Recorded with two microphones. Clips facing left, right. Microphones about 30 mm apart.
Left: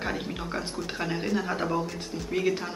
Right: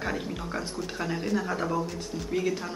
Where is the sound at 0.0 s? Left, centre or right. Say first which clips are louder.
Even; centre.